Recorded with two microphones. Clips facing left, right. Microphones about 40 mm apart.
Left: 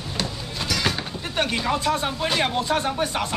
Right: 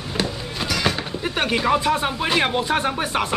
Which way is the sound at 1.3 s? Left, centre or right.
Centre.